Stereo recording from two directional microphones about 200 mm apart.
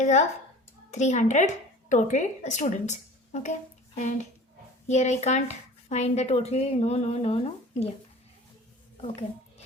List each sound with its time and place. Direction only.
0.0 s a woman's voice: 35° left (ahead or behind)